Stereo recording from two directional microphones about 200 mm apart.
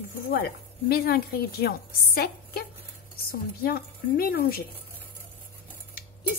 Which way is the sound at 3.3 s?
50° left (ahead or behind).